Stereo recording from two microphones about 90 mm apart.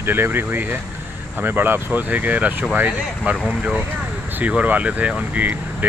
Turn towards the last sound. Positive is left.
turn(degrees=-15)  # may be behind; listen again after turning